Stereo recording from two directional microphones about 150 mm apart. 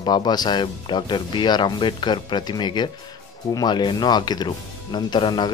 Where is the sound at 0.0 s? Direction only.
30° left (ahead or behind).